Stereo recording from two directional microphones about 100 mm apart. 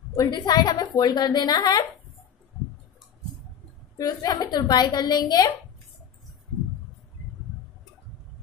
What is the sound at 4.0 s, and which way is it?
A woman's voice, 40° left (ahead or behind).